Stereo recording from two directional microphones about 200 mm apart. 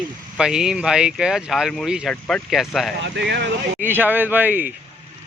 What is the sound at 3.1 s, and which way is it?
Speech, 60° right (ahead or behind).